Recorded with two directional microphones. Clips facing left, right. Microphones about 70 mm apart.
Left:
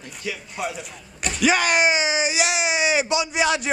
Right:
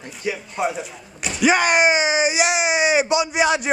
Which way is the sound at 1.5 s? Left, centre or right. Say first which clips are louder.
Right 3 dB; right.